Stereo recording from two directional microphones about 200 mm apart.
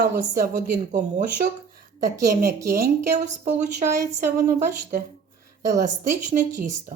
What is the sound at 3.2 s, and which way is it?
Speech, 35° right (ahead or behind).